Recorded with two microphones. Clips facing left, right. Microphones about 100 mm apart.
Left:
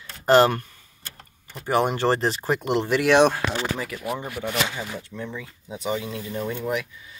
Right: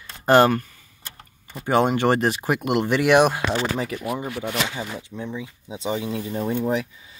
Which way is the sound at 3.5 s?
25° right (ahead or behind).